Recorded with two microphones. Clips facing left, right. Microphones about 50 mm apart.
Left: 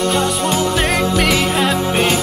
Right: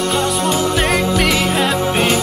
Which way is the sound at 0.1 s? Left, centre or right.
Centre.